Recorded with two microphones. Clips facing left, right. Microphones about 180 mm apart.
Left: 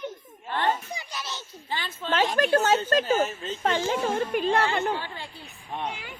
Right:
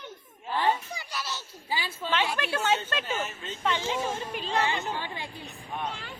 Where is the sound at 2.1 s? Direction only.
40° left (ahead or behind).